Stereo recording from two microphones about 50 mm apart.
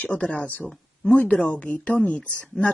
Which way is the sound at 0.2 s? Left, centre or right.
Left.